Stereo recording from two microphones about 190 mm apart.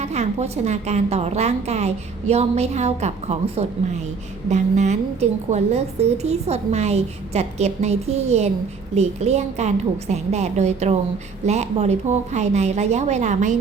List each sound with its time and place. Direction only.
0.0 s a woman's voice: 35° right (ahead or behind)